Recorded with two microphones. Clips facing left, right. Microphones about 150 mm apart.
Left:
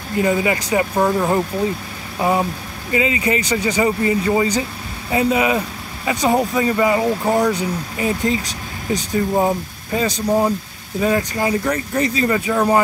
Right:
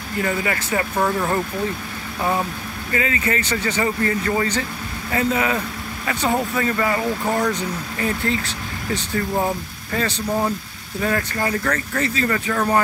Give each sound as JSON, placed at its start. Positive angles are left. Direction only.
{"t": 0.2, "sound": "speech", "side_deg": 20}